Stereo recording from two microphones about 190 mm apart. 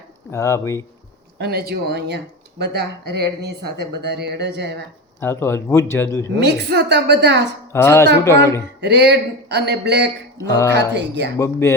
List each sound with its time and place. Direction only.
0.3 s a man's voice: 15° left (ahead or behind)
1.4 s speech: 60° right (ahead or behind)
5.2 s a man's voice: 15° left (ahead or behind)
6.2 s speech: 65° right (ahead or behind)
7.7 s a man's voice: 15° left (ahead or behind)
8.8 s speech: 60° right (ahead or behind)
10.3 s a man's voice: 15° left (ahead or behind)
10.8 s speech: 65° right (ahead or behind)
11.3 s a man's voice: 15° left (ahead or behind)